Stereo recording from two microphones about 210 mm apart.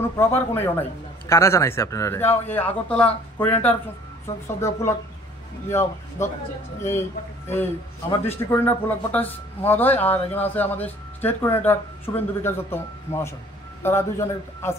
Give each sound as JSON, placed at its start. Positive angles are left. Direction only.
{"t": 0.2, "sound": "speech", "side_deg": 10}